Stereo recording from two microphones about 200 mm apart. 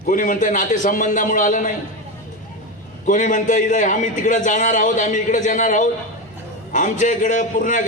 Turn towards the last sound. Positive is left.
turn(degrees=40)  # may be behind; listen again after turning